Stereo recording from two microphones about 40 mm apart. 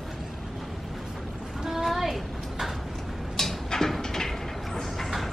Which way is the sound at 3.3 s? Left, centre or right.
Centre.